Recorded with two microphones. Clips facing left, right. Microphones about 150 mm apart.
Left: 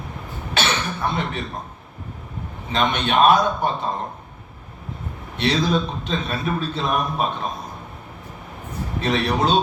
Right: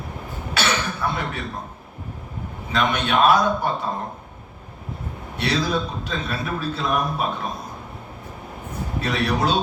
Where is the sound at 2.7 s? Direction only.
25° left (ahead or behind).